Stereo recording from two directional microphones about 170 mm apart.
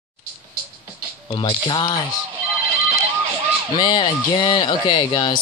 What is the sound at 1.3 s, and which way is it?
Speech, 25° left (ahead or behind).